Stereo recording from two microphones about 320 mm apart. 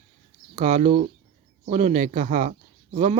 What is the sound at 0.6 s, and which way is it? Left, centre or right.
Speech, right.